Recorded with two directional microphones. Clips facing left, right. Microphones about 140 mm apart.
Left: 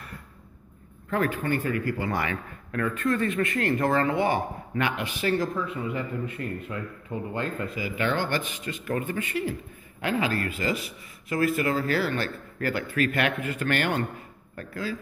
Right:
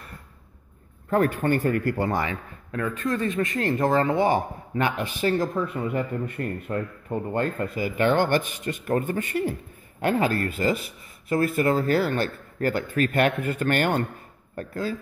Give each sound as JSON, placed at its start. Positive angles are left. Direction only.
{"t": 1.1, "sound": "speech", "side_deg": -45}
{"t": 2.0, "sound": "speech", "side_deg": -25}
{"t": 4.3, "sound": "a man's voice", "side_deg": -40}
{"t": 5.8, "sound": "speech", "side_deg": -50}
{"t": 8.8, "sound": "a man's voice", "side_deg": -40}
{"t": 11.2, "sound": "a man's voice", "side_deg": -30}
{"t": 11.9, "sound": "a man's voice", "side_deg": -45}